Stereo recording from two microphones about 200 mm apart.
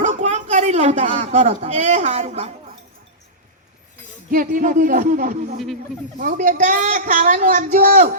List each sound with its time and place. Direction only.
0.0 s speech: 35° right (ahead or behind)
4.3 s a woman's voice: 45° right (ahead or behind)